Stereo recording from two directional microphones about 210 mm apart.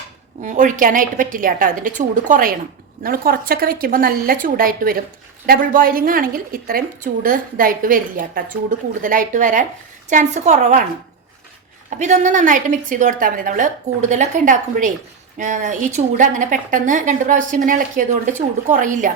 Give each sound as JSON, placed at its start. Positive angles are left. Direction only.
{"t": 0.4, "sound": "a woman's voice", "side_deg": -35}
{"t": 11.9, "sound": "a woman's voice", "side_deg": -35}